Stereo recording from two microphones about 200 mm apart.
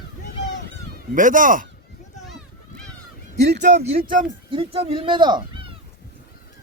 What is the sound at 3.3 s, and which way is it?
Speech, 55° right (ahead or behind).